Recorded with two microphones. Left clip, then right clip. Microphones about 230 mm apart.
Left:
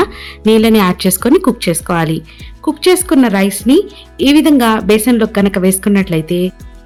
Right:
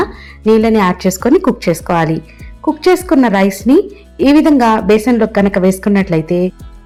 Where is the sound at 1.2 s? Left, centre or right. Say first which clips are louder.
Even; centre.